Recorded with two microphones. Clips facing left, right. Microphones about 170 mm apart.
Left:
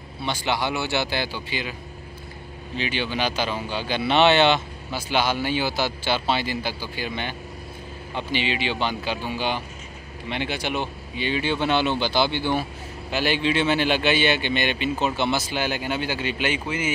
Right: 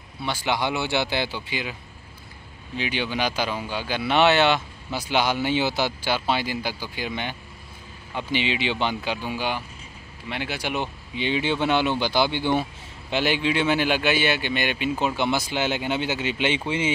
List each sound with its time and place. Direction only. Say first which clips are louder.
0.2 s speech: even; 5° right (ahead or behind)
0.6 s a man's voice: even; 20° right (ahead or behind)
2.8 s speech: even; 15° right (ahead or behind)
4.9 s speech: even; 15° right (ahead or behind)
10.7 s speech: left 1 dB; 20° right (ahead or behind)